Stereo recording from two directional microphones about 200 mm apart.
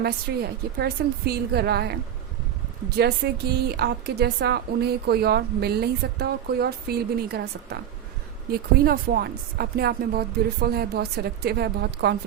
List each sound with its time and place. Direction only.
0.3 s a woman's voice: 55° right (ahead or behind)